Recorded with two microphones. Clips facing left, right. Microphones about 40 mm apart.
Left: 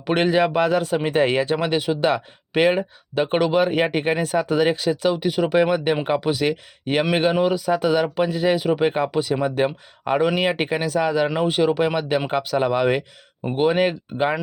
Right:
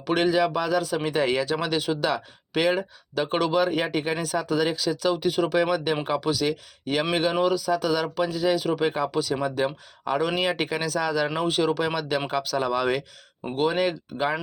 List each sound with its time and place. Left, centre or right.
0.0 s a man's voice: left
2.0 s speech: left
5.0 s speech: centre
5.5 s speech: left
10.3 s speech: left